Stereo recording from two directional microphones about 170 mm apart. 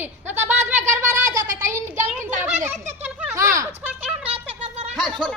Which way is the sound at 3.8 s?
5° right (ahead or behind).